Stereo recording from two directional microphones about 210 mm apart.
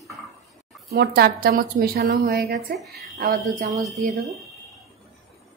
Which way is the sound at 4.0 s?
35° right (ahead or behind).